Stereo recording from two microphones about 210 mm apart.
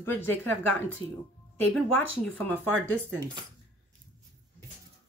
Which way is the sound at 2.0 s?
10° left (ahead or behind).